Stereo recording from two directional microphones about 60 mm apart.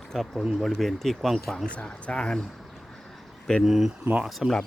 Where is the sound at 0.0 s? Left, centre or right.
Centre.